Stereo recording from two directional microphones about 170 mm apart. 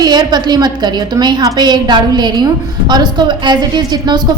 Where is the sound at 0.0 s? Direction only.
25° right (ahead or behind).